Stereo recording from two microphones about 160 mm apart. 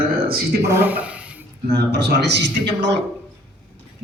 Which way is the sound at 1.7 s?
90° right.